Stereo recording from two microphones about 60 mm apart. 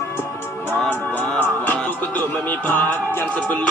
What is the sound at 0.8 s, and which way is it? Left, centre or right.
Music, left.